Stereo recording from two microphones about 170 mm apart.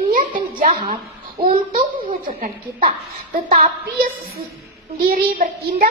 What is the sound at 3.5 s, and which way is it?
A child's voice, 60° right (ahead or behind).